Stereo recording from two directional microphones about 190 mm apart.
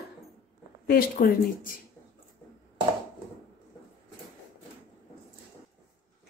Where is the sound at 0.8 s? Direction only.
50° left (ahead or behind).